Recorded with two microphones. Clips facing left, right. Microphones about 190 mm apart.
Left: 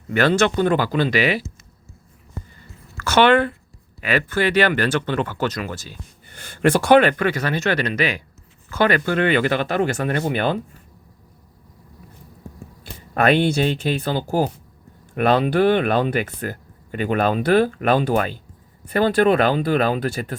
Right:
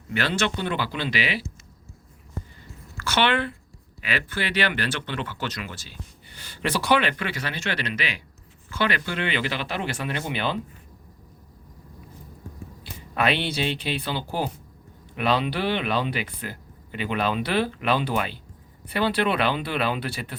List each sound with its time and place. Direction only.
0.1 s speech: 50° left (ahead or behind)
3.0 s speech: 45° left (ahead or behind)
12.8 s speech: 50° left (ahead or behind)